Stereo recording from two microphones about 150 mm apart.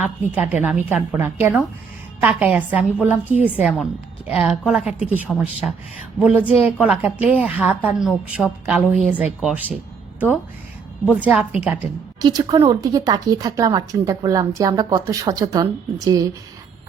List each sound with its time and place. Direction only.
0.2 s a woman's voice: 10° right (ahead or behind)
11.1 s a woman's voice: 10° right (ahead or behind)
12.2 s a woman's voice: 25° right (ahead or behind)